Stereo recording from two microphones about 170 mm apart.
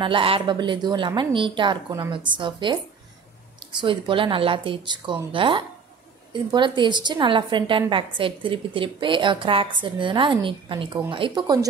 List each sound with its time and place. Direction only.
0.0 s a woman's voice: 30° right (ahead or behind)